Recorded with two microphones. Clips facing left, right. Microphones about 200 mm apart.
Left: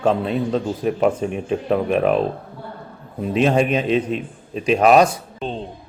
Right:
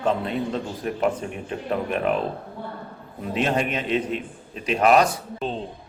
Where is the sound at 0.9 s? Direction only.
25° left (ahead or behind).